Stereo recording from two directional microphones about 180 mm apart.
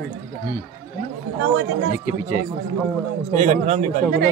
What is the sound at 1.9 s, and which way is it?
Speech, 50° left (ahead or behind).